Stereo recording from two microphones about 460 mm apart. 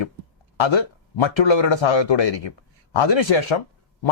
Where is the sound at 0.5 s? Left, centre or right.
Left.